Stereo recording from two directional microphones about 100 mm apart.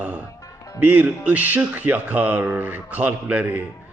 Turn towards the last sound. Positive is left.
turn(degrees=-15)  # may be behind; listen again after turning